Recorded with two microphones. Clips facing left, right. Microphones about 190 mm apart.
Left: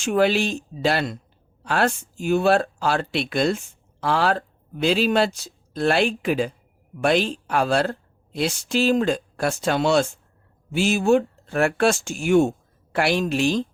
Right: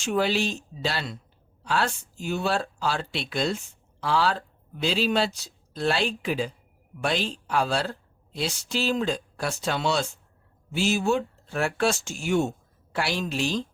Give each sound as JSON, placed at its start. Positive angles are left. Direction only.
{"t": 0.0, "sound": "speech", "side_deg": 55}